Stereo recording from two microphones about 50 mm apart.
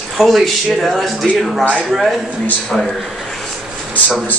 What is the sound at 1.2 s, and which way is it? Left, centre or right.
Speech, left.